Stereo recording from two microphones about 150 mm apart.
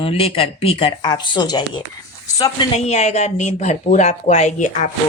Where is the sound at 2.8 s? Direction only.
45° left (ahead or behind).